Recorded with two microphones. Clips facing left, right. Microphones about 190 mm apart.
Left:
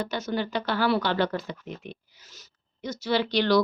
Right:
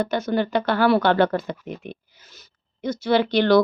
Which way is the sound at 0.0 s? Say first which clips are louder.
Right 6 dB; 55° right (ahead or behind).